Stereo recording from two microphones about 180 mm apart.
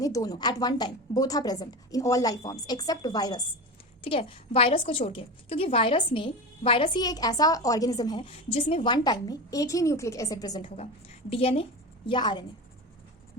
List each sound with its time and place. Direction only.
0.0 s a woman's voice: 20° left (ahead or behind)
11.3 s a woman's voice: 30° left (ahead or behind)